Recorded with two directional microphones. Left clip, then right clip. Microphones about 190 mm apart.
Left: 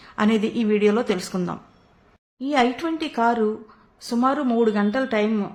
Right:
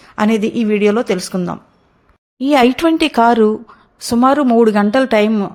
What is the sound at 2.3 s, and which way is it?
Speech, 45° right (ahead or behind).